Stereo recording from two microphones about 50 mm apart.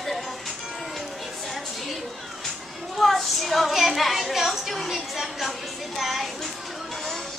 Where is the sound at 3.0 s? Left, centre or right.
Centre.